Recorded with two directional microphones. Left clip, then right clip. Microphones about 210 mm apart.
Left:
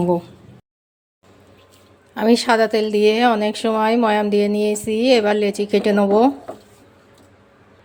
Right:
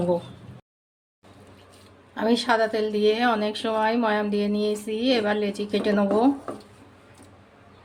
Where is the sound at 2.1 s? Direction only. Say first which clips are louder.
Left 6 dB; 40° left (ahead or behind).